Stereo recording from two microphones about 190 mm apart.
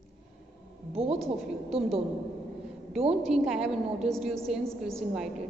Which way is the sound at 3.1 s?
Centre (ahead or behind).